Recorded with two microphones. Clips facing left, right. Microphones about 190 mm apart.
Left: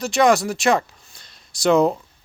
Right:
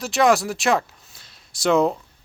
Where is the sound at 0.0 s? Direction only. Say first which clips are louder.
Left 1 dB; centre (ahead or behind).